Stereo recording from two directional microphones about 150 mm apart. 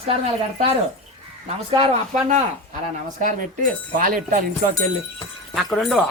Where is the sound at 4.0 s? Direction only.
65° right (ahead or behind).